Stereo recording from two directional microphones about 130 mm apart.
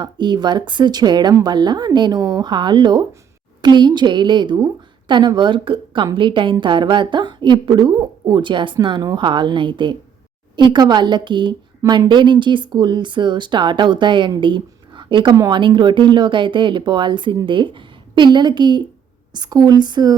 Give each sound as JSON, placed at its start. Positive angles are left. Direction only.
{"t": 0.0, "sound": "a woman's voice", "side_deg": -35}